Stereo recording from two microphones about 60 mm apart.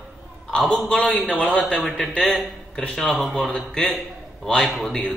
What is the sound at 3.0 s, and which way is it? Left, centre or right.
Speech, centre.